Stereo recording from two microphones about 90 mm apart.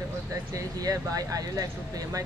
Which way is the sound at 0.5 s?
40° right (ahead or behind).